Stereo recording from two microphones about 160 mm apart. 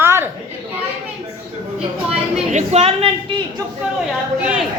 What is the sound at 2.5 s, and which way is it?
Speech, 40° right (ahead or behind).